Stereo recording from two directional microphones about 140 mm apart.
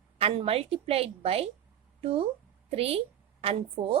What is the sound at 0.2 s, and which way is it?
A woman's voice, 45° right (ahead or behind).